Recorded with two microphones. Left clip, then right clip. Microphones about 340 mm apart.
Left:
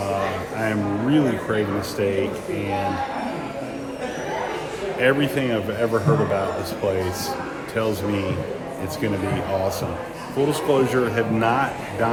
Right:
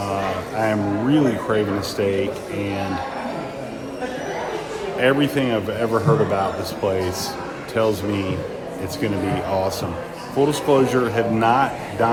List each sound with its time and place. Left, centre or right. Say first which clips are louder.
0.6 s a man's voice: right 3 dB; centre
4.9 s a man's voice: right 2 dB; centre
7.8 s a man's voice: right 4 dB; centre
10.5 s a man's voice: right 1 dB; centre